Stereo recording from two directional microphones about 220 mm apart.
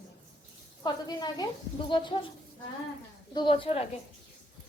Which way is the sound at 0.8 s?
20° left (ahead or behind).